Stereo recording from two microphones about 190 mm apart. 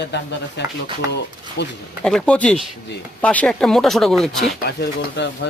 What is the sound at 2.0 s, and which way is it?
Speech, 5° left (ahead or behind).